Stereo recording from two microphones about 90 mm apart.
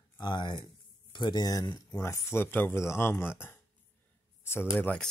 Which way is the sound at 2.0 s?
30° left (ahead or behind).